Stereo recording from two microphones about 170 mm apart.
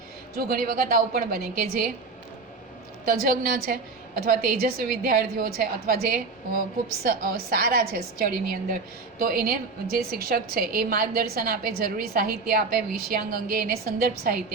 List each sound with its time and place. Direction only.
0.3 s a woman's voice: 60° right (ahead or behind)
3.1 s a woman's voice: 55° right (ahead or behind)